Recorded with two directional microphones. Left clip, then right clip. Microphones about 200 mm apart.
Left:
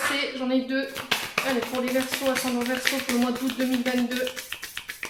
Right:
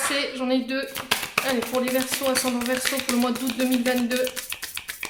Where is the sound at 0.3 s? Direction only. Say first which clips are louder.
Right 1 dB; 35° right (ahead or behind).